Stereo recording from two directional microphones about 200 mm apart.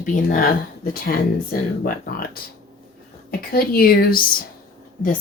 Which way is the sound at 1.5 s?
45° left (ahead or behind).